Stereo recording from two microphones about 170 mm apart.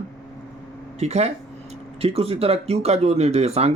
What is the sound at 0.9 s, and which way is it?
Speech, 40° right (ahead or behind).